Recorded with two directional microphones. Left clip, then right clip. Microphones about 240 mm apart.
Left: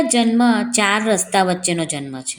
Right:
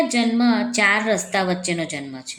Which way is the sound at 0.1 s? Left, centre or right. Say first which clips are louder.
Left 4 dB; left.